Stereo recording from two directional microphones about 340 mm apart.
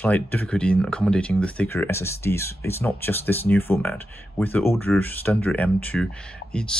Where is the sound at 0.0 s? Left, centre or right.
Centre.